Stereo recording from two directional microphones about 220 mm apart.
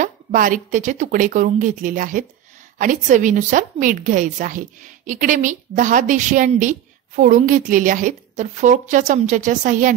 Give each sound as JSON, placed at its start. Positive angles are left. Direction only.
{"t": 0.0, "sound": "a woman's voice", "side_deg": -35}